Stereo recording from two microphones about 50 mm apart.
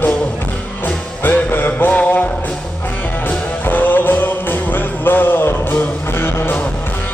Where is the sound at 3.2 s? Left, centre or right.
Left.